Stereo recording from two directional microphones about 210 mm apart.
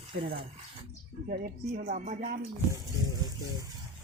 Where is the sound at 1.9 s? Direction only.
40° right (ahead or behind).